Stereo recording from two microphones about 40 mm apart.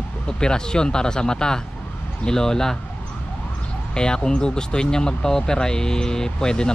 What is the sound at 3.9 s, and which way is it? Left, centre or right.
Speech, left.